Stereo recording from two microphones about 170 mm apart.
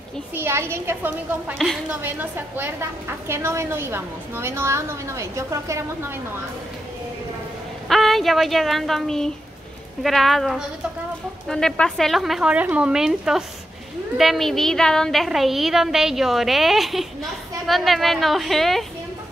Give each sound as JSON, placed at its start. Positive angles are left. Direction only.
{"t": 0.3, "sound": "a woman's voice", "side_deg": -15}
{"t": 1.6, "sound": "speech", "side_deg": 0}
{"t": 2.0, "sound": "a woman's voice", "side_deg": -10}
{"t": 7.9, "sound": "speech", "side_deg": 0}